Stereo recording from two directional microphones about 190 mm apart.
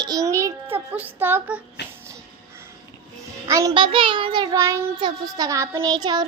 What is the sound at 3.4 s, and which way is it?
A child's voice, 20° right (ahead or behind).